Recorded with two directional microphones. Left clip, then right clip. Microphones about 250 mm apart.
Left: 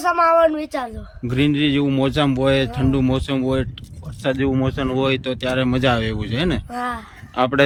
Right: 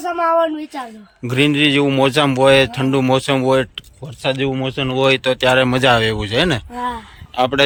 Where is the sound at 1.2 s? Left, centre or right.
Centre.